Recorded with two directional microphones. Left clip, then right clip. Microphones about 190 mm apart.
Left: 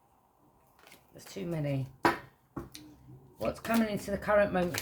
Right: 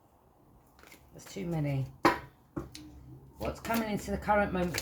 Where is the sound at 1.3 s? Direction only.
30° left (ahead or behind).